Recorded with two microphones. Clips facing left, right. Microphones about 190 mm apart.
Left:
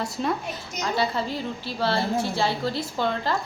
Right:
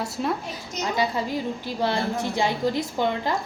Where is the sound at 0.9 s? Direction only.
15° right (ahead or behind).